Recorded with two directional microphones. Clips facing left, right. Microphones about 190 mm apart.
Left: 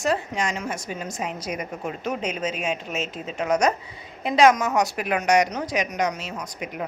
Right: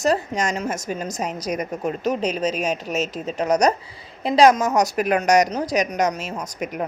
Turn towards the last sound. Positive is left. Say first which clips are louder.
# right 4 dB
turn(degrees=-45)  # may be behind; listen again after turning